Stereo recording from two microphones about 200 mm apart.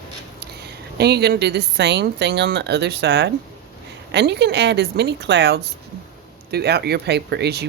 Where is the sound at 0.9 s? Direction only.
55° right (ahead or behind).